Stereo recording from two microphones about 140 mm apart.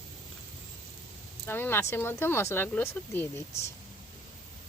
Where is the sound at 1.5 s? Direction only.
15° left (ahead or behind).